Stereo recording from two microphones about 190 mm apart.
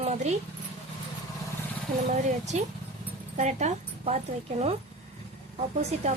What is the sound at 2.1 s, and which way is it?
Speech, 40° right (ahead or behind).